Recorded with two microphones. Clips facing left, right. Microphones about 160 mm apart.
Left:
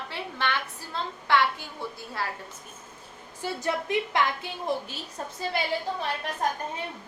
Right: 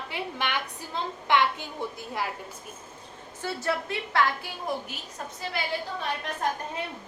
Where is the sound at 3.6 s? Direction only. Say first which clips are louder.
Left 3 dB; 20° left (ahead or behind).